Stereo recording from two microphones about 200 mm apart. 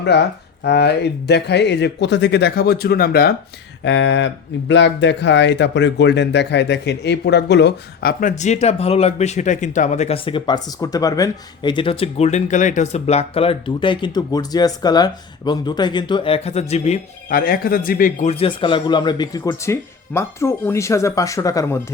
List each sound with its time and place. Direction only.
0.0 s speech: 55° left (ahead or behind)
3.8 s speech: 65° left (ahead or behind)
8.2 s speech: 35° left (ahead or behind)
17.2 s speech: 45° left (ahead or behind); by 21.9 s 15° left (ahead or behind)